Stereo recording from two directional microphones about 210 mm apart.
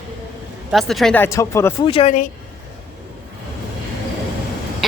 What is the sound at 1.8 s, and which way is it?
Speech, 25° left (ahead or behind).